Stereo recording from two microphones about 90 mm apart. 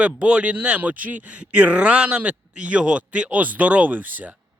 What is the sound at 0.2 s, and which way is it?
Speech, 10° right (ahead or behind).